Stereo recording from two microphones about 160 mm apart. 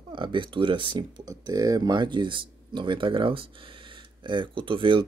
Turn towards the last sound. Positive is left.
turn(degrees=-30)  # may be behind; listen again after turning